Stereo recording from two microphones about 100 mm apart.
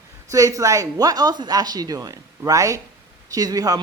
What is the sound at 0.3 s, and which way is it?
A man's voice, 35° right (ahead or behind).